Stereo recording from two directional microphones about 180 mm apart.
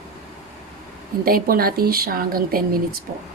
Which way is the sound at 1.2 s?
55° right (ahead or behind).